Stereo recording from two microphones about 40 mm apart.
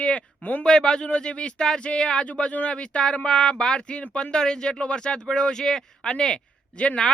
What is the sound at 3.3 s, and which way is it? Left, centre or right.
Speech, centre.